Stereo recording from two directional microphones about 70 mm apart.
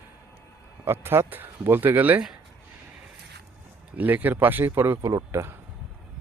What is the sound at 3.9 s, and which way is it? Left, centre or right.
Speech, right.